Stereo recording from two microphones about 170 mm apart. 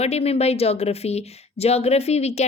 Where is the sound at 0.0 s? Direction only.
35° left (ahead or behind).